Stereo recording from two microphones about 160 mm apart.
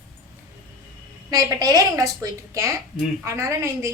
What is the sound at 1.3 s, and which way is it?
A woman's voice, 25° right (ahead or behind).